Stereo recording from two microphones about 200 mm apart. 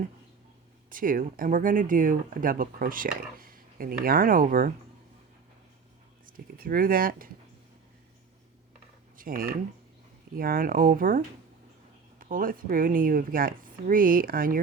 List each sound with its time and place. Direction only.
0.9 s speech: 45° right (ahead or behind)
6.2 s speech: 45° right (ahead or behind)
9.1 s speech: 45° right (ahead or behind)
12.2 s speech: 45° right (ahead or behind)